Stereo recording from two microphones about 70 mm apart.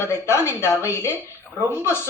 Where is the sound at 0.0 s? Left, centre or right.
Left.